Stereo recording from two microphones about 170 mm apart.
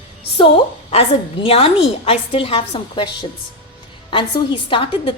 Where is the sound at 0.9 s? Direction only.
35° left (ahead or behind).